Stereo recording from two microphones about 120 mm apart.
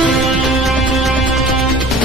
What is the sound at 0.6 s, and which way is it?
Music, centre (ahead or behind).